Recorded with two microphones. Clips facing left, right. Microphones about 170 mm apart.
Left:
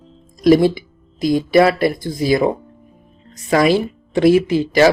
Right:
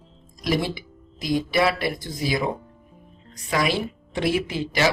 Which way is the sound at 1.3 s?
45° left (ahead or behind).